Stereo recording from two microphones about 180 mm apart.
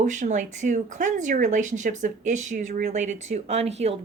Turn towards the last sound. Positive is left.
turn(degrees=-35)  # may be behind; listen again after turning